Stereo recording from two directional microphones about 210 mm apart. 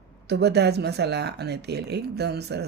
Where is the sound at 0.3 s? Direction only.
50° right (ahead or behind).